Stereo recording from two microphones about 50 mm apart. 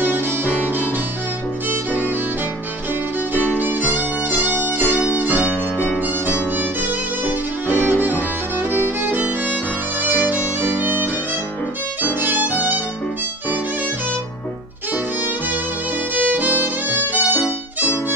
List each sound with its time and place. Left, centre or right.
0.0 s violin: right
0.6 s music: right
1.9 s music: right
3.5 s violin: right
4.6 s music: right
5.9 s violin: right
15.2 s music: right
16.2 s violin: right